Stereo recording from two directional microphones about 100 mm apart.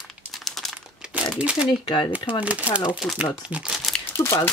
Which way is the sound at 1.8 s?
55° left (ahead or behind).